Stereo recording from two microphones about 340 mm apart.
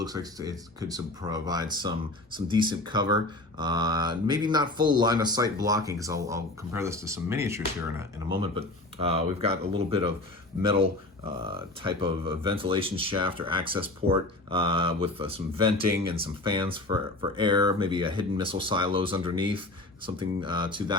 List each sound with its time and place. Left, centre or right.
0.0 s speech: centre